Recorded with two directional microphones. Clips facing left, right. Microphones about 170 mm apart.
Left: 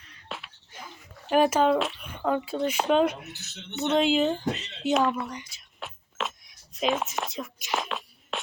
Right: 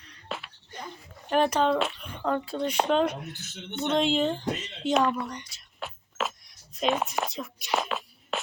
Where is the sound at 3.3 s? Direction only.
55° right (ahead or behind).